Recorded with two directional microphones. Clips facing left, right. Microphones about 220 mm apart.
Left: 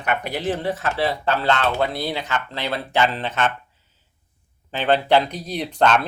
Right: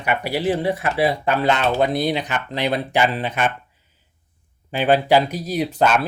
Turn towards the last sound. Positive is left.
turn(degrees=-5)  # may be behind; listen again after turning